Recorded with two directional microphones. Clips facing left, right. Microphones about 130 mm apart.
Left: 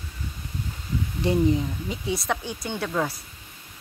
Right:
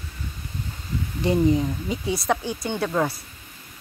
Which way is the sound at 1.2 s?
Centre (ahead or behind).